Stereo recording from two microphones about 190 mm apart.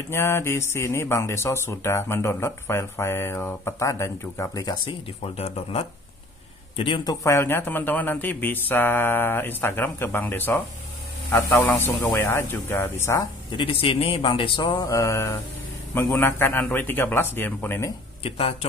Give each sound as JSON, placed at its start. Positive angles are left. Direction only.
{"t": 0.1, "sound": "speech", "side_deg": 15}
{"t": 7.2, "sound": "speech", "side_deg": 15}
{"t": 18.2, "sound": "speech", "side_deg": 30}